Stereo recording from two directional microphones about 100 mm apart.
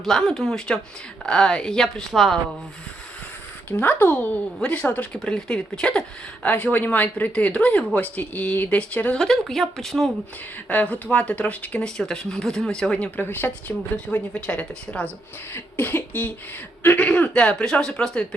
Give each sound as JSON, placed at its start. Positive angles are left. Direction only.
{"t": 0.0, "sound": "speech", "side_deg": 5}
{"t": 3.7, "sound": "speech", "side_deg": 20}
{"t": 6.4, "sound": "speech", "side_deg": 15}
{"t": 10.7, "sound": "speech", "side_deg": 15}